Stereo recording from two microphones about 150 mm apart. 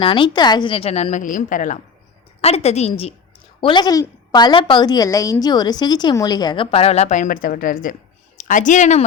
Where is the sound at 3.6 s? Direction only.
30° left (ahead or behind).